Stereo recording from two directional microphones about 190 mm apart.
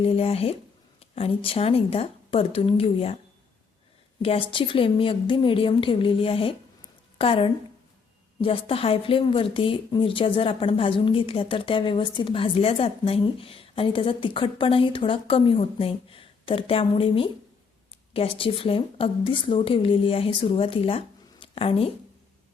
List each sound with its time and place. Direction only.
0.0 s speech: 30° left (ahead or behind)
4.2 s a woman's voice: 30° left (ahead or behind)